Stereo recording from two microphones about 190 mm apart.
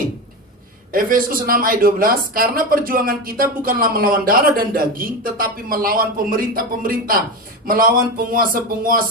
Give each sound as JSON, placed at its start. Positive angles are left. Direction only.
{"t": 0.9, "sound": "speech", "side_deg": -50}